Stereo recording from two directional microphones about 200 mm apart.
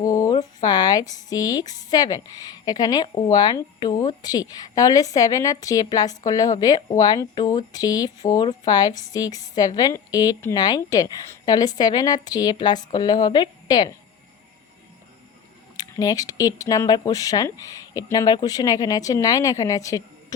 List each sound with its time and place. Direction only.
0.0 s a woman's voice: 15° left (ahead or behind)
15.8 s speech: 20° left (ahead or behind)